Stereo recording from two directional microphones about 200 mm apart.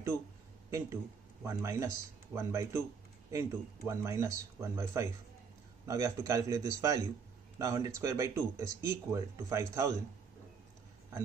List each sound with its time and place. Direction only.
0.7 s speech: 15° right (ahead or behind)